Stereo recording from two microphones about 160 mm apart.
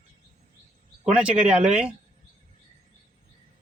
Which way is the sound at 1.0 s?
5° right (ahead or behind).